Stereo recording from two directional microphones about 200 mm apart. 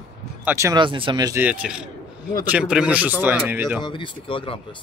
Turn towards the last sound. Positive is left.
turn(degrees=25)  # may be behind; listen again after turning